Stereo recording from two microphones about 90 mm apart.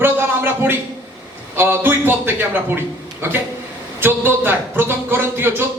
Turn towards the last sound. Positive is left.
turn(degrees=-25)  # may be behind; listen again after turning